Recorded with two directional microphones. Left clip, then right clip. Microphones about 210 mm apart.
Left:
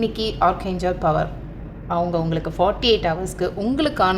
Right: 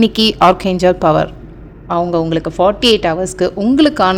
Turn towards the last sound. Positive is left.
turn(degrees=-35)  # may be behind; listen again after turning